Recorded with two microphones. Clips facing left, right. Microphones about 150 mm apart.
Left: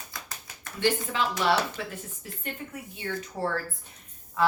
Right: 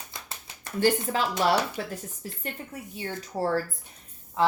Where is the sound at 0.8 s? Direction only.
40° right (ahead or behind).